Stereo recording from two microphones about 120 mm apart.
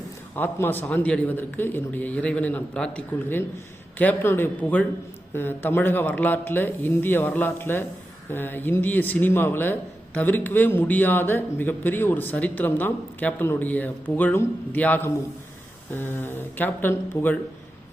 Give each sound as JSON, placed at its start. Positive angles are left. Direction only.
{"t": 0.3, "sound": "a man's voice", "side_deg": 15}
{"t": 3.9, "sound": "a man's voice", "side_deg": 15}